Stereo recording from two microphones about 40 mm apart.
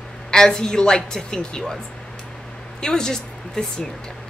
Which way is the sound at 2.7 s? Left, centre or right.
Centre.